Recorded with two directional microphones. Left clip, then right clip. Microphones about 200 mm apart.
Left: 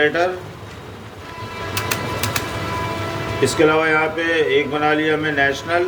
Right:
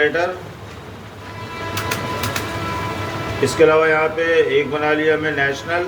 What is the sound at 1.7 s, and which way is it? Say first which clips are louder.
Music: even; 50° left (ahead or behind).